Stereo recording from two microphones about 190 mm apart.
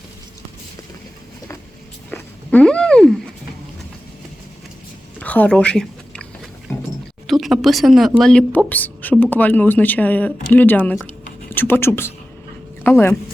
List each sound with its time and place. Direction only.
2.0 s a sound: 5° left (ahead or behind)
5.2 s chewing: 10° left (ahead or behind)
7.3 s a woman's voice: centre (ahead or behind)